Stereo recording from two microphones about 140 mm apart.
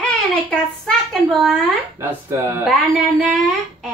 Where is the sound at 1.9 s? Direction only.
15° right (ahead or behind).